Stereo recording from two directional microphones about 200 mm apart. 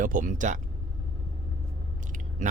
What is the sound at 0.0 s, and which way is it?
Speech, 40° right (ahead or behind).